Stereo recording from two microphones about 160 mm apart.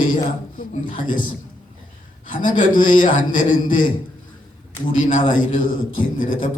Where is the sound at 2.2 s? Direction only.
55° left (ahead or behind).